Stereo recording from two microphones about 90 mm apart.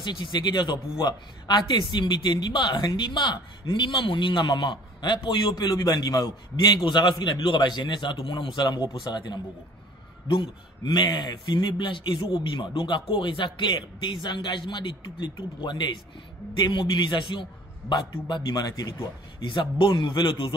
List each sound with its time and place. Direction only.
0.0 s speech: 55° left (ahead or behind)
10.2 s speech: 70° left (ahead or behind); by 19.0 s 40° left (ahead or behind)
19.4 s speech: 65° left (ahead or behind)